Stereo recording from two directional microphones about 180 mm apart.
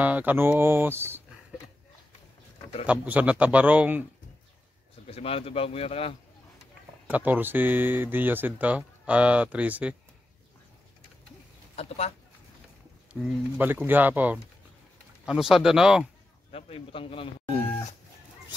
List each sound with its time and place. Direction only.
0.0 s speech: 10° right (ahead or behind)
2.9 s speech: 10° right (ahead or behind)
5.0 s speech: 30° left (ahead or behind)
7.1 s speech: 10° right (ahead or behind)
11.7 s speech: 35° left (ahead or behind)
13.1 s speech: 5° right (ahead or behind)
16.5 s speech: 30° left (ahead or behind)